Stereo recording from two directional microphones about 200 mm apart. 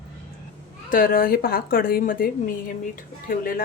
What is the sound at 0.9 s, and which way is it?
Speech, 45° left (ahead or behind).